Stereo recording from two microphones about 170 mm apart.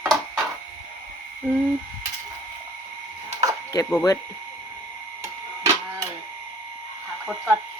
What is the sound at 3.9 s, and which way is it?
Speech, 20° left (ahead or behind).